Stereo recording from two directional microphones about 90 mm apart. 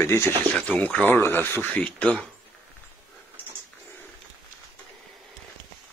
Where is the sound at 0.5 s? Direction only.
15° left (ahead or behind).